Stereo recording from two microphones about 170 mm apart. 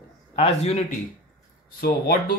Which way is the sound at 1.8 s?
60° left (ahead or behind).